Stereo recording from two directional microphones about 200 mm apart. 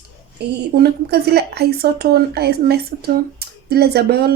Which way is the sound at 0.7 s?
55° right (ahead or behind).